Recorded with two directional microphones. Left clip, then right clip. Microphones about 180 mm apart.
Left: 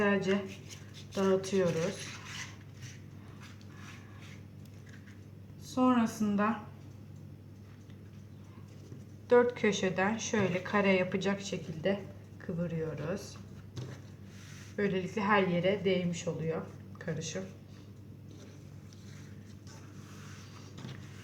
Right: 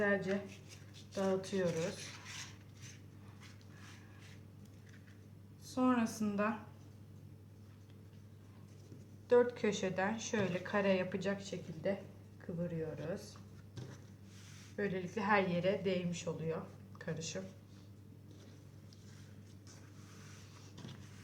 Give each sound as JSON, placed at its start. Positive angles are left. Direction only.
{"t": 0.0, "sound": "speech", "side_deg": 15}
{"t": 1.3, "sound": "speech", "side_deg": 0}
{"t": 5.7, "sound": "a woman's voice", "side_deg": -15}
{"t": 9.3, "sound": "speech", "side_deg": 0}
{"t": 14.8, "sound": "a woman's voice", "side_deg": 5}